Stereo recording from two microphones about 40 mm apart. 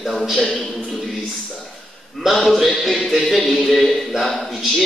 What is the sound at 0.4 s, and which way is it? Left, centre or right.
Music, centre.